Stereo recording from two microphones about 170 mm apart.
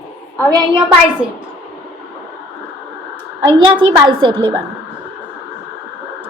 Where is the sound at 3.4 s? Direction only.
30° right (ahead or behind).